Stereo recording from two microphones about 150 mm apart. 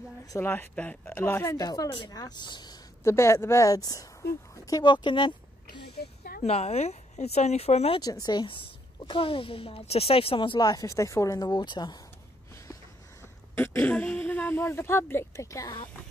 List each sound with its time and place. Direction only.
0.3 s speech: 15° left (ahead or behind)
3.0 s a woman's voice: 15° left (ahead or behind); by 5.9 s 35° left (ahead or behind)
5.9 s a sound: 90° left
6.4 s speech: 45° left (ahead or behind)
8.0 s speech: 25° left (ahead or behind)
13.6 s speech: 10° left (ahead or behind)